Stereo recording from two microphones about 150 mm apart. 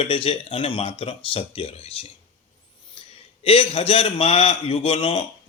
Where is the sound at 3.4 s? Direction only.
40° left (ahead or behind).